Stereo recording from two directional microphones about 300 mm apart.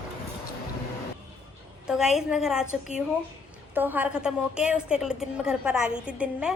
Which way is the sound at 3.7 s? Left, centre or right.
Centre.